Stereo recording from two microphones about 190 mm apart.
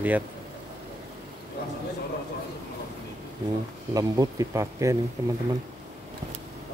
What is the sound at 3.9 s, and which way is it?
Speech, 20° right (ahead or behind).